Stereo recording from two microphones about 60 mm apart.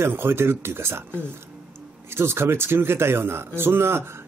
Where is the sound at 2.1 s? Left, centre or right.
Right.